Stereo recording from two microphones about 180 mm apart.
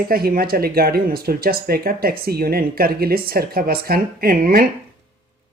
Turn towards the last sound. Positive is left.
turn(degrees=-55)  # may be behind; listen again after turning